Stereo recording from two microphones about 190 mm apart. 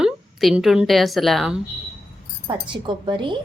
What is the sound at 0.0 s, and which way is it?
A woman's voice, centre (ahead or behind).